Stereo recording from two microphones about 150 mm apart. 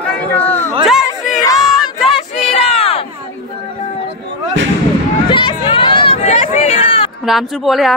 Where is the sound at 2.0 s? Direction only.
40° left (ahead or behind).